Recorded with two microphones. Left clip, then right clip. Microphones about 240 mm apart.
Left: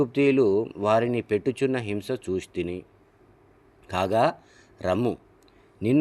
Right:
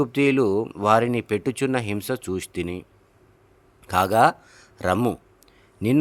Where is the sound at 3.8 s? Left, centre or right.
Right.